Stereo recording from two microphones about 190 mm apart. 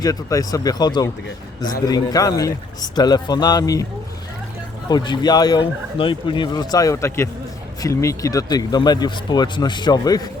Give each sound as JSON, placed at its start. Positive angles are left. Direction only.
{"t": 0.0, "sound": "speech", "side_deg": 15}
{"t": 4.9, "sound": "speech", "side_deg": 25}